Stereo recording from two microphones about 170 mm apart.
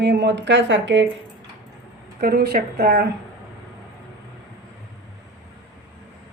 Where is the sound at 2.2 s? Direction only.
60° right (ahead or behind).